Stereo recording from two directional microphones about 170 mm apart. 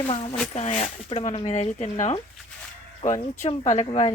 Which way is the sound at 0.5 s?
40° left (ahead or behind).